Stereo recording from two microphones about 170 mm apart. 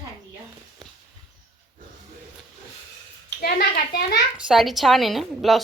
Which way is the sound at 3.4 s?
65° left (ahead or behind).